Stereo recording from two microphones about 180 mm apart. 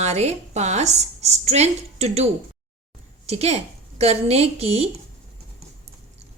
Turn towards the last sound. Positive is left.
turn(degrees=-35)  # may be behind; listen again after turning